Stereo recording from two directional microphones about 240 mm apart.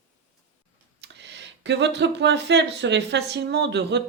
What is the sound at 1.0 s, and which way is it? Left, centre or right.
Speech, right.